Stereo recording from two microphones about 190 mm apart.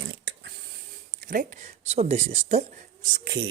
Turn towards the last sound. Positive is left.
turn(degrees=-45)  # may be behind; listen again after turning